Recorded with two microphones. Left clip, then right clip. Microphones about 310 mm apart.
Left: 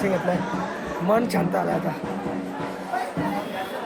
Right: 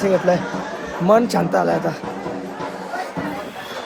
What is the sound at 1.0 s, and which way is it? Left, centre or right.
Speech, right.